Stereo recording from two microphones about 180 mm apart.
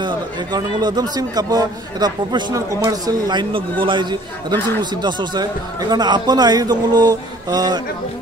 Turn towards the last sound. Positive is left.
turn(degrees=-20)  # may be behind; listen again after turning